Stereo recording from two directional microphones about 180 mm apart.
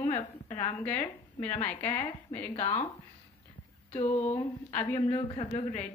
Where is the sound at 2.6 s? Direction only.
35° left (ahead or behind).